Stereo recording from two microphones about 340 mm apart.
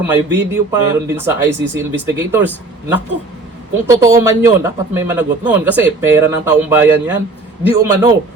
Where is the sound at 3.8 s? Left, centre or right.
Centre.